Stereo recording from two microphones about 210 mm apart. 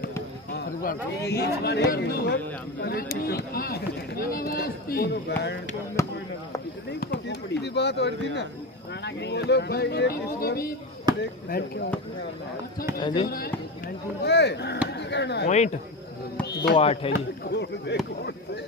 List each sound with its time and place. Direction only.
0.5 s speech: 45° left (ahead or behind)
6.0 s speech: 15° left (ahead or behind)
6.9 s speech: 55° left (ahead or behind)
13.0 s speech: 25° left (ahead or behind)
14.2 s speech: 55° left (ahead or behind)
16.4 s music: 50° left (ahead or behind)
16.7 s speech: 30° left (ahead or behind)
17.1 s speech: 55° left (ahead or behind)